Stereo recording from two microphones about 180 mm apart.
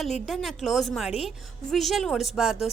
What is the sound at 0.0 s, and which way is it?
A woman's voice, centre (ahead or behind).